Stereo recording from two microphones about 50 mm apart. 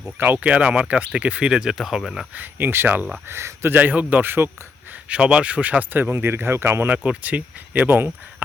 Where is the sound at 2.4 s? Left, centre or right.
Right.